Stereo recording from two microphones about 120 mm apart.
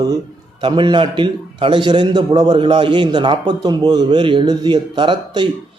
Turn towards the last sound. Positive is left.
turn(degrees=-40)  # may be behind; listen again after turning